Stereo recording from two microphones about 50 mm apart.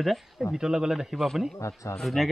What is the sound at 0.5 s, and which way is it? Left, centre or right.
Speech, centre.